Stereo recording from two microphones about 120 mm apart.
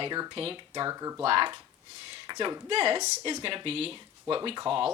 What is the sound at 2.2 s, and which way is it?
Speech, 35° right (ahead or behind).